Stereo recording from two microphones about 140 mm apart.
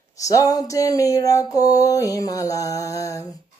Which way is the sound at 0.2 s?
25° left (ahead or behind).